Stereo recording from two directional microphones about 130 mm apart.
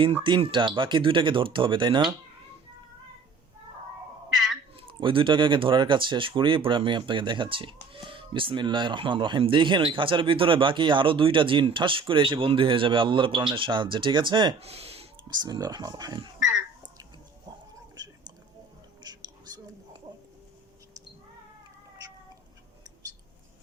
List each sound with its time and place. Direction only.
0.0 s speech: 40° right (ahead or behind)
4.8 s speech: 40° right (ahead or behind)
14.6 s speech: 50° right (ahead or behind)
15.3 s speech: 30° right (ahead or behind)
17.9 s whispering: 30° right (ahead or behind)